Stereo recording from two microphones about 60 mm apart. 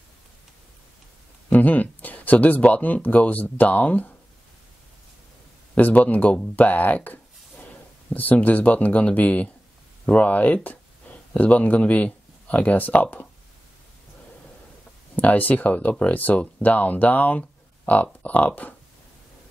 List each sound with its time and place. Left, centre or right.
1.5 s speech: left
5.8 s speech: left
15.1 s speech: left